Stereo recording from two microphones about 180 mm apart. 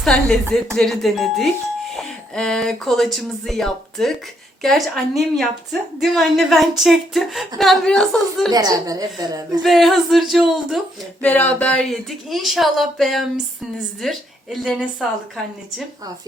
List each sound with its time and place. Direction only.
0.0 s a woman's voice: 5° left (ahead or behind)
8.5 s a woman's voice: 20° right (ahead or behind)
9.6 s a woman's voice: centre (ahead or behind)
11.2 s a woman's voice: 10° left (ahead or behind)